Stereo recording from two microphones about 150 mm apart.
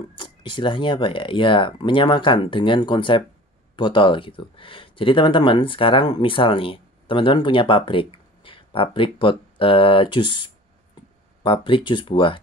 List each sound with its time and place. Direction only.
0.1 s speech: 30° left (ahead or behind)